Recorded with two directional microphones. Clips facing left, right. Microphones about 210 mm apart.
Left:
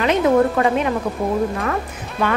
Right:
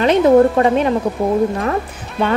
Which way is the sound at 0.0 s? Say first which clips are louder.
Right 5 dB; 35° right (ahead or behind).